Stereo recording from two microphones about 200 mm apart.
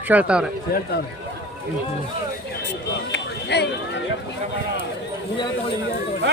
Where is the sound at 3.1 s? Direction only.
60° left (ahead or behind).